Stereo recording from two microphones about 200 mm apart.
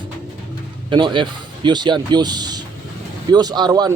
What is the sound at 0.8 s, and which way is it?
A man's voice, 25° right (ahead or behind).